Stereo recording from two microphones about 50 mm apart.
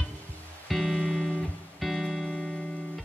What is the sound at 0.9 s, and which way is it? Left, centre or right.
Music, centre.